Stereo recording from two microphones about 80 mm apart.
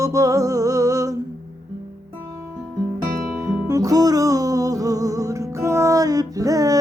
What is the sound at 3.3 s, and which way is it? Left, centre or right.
Music, right.